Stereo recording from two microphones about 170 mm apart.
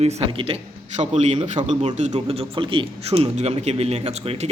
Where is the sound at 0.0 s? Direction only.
35° right (ahead or behind).